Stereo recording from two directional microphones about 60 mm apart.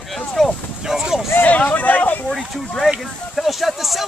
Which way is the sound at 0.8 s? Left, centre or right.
Centre.